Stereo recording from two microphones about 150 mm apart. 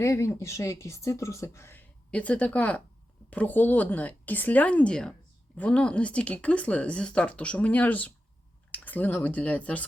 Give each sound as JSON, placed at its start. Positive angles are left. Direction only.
{"t": 0.0, "sound": "speech", "side_deg": 20}